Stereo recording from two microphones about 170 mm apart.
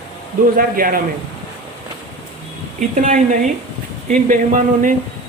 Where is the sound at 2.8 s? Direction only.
50° right (ahead or behind).